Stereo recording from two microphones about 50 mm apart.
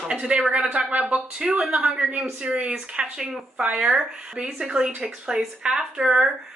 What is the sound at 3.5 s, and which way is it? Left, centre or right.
Speech, right.